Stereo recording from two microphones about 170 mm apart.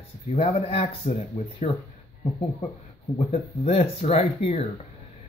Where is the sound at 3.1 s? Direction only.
35° left (ahead or behind).